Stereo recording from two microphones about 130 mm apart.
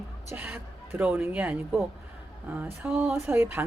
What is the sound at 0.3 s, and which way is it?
Speech, 15° right (ahead or behind).